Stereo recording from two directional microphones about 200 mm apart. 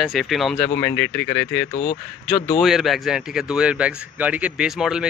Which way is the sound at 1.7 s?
25° left (ahead or behind).